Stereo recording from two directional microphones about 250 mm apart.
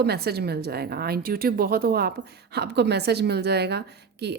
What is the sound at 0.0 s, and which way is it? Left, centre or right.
A woman's voice, right.